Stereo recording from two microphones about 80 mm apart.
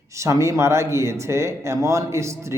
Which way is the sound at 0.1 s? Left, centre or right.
Right.